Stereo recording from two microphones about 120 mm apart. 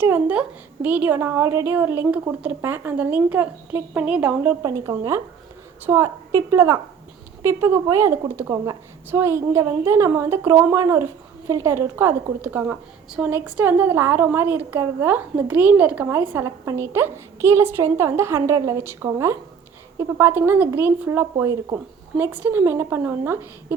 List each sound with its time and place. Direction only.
0.0 s a woman's voice: 15° right (ahead or behind)
4.6 s a woman's voice: 25° right (ahead or behind)